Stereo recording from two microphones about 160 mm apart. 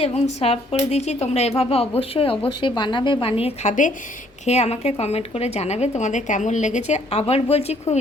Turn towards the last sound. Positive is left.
turn(degrees=40)  # may be behind; listen again after turning